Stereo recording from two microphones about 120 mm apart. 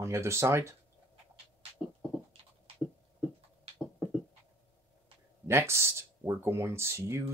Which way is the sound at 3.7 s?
50° right (ahead or behind).